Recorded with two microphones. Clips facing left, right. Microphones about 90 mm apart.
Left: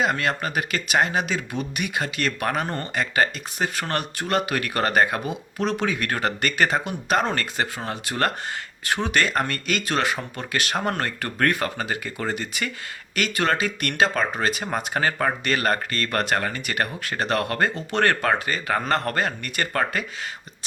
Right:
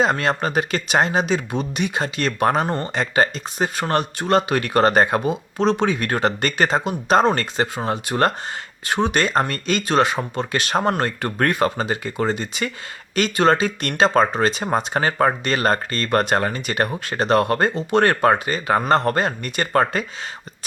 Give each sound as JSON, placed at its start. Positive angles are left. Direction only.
{"t": 0.0, "sound": "speech", "side_deg": -30}